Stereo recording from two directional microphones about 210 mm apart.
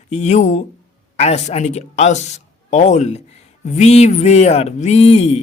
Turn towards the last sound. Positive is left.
turn(degrees=30)  # may be behind; listen again after turning